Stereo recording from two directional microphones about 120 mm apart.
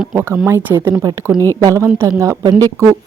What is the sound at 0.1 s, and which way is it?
Speech, 20° right (ahead or behind).